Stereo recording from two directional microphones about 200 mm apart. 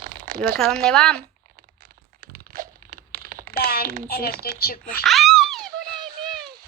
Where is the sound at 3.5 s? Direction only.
50° left (ahead or behind).